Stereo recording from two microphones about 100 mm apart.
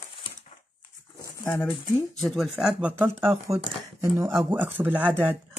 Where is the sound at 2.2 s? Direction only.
Centre (ahead or behind).